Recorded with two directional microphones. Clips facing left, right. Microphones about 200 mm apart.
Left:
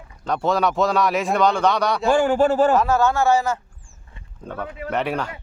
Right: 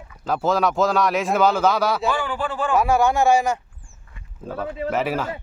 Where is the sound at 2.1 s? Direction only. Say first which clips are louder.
Left 8 dB; 45° left (ahead or behind).